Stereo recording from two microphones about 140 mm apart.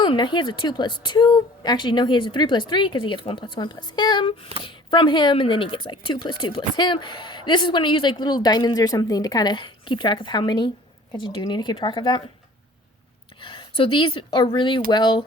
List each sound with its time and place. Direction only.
0.0 s speech: 30° left (ahead or behind)
13.4 s speech: 40° left (ahead or behind)